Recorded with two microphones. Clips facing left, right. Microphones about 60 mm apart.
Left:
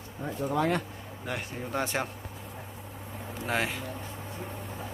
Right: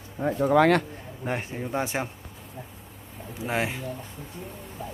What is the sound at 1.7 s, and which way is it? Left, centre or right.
Speech, centre.